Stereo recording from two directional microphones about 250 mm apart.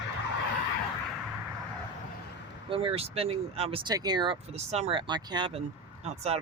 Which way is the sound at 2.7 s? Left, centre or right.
Right.